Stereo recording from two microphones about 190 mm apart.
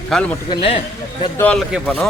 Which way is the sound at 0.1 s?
Centre (ahead or behind).